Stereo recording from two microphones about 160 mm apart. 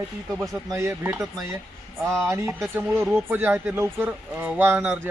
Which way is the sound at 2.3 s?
15° right (ahead or behind).